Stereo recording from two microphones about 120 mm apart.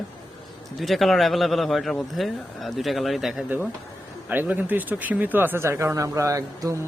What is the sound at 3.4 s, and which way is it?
Speech, 15° right (ahead or behind).